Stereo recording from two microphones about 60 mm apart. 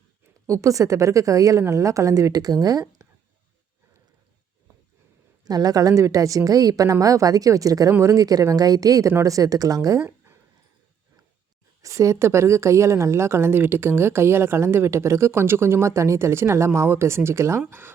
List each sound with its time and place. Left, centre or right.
0.4 s a woman's voice: right
5.5 s a woman's voice: right
6.9 s a woman's voice: right
7.9 s a woman's voice: right
11.8 s a woman's voice: right
17.7 s speech: right